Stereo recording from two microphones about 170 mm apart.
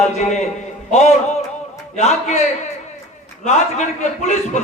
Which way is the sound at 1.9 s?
40° left (ahead or behind).